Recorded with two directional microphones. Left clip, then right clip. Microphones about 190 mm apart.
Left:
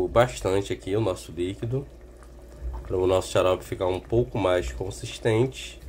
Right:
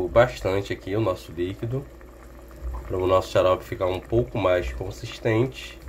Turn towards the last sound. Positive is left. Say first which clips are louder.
# even
turn(degrees=0)  # may be behind; listen again after turning